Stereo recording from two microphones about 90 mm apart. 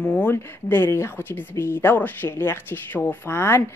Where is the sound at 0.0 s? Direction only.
15° left (ahead or behind).